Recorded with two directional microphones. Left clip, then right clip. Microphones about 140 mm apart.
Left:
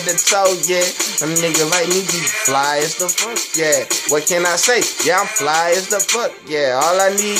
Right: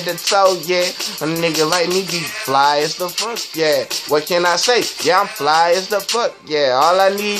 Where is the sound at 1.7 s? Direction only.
20° left (ahead or behind).